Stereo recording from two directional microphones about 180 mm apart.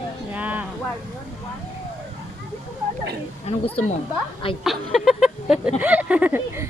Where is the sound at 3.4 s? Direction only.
30° left (ahead or behind).